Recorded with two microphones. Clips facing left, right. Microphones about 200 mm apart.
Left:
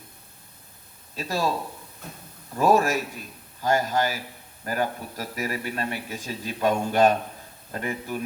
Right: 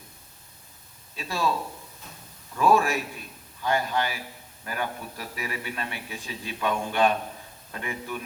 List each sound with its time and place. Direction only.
1.1 s speech: 40° left (ahead or behind)
2.6 s a man's voice: 40° left (ahead or behind)